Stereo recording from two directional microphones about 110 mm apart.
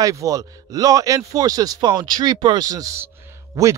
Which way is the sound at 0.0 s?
30° right (ahead or behind).